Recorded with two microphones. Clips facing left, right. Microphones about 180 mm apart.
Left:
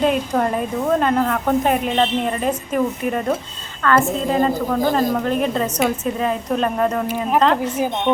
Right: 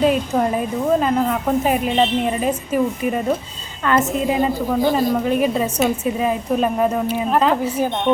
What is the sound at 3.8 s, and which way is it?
A woman's voice, 20° right (ahead or behind).